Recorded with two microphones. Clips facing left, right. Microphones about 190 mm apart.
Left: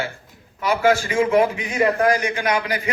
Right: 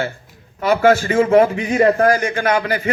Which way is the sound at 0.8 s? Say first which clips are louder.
Right 4 dB; 50° right (ahead or behind).